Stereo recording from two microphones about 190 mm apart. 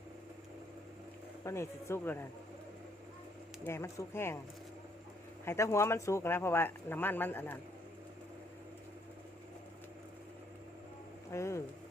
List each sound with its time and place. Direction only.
1.5 s speech: 15° left (ahead or behind)
3.6 s speech: 15° left (ahead or behind)
5.5 s speech: 15° left (ahead or behind)
11.3 s speech: 15° left (ahead or behind)